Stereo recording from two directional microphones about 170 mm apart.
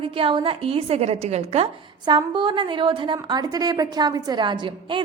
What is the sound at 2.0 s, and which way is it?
A woman's voice, 30° right (ahead or behind).